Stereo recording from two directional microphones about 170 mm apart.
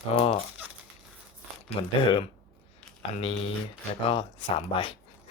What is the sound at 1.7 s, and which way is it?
Speech, 30° left (ahead or behind).